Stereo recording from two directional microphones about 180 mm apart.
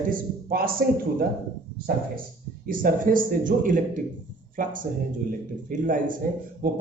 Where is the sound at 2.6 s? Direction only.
50° right (ahead or behind).